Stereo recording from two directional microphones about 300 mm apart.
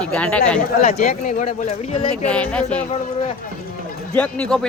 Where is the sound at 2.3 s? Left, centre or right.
Centre.